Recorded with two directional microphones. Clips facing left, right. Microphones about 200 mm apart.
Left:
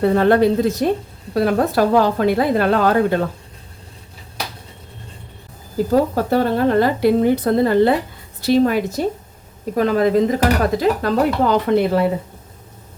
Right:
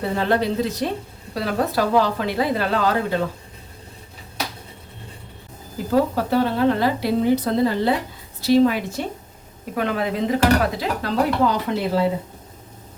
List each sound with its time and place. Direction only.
0.0 s speech: 55° left (ahead or behind)
5.9 s a woman's voice: 45° left (ahead or behind)
10.8 s speech: 55° left (ahead or behind)